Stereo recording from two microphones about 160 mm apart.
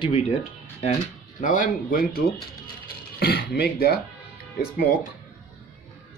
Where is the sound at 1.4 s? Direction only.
50° left (ahead or behind).